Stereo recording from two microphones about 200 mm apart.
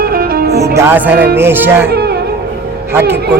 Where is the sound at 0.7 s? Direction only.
10° right (ahead or behind).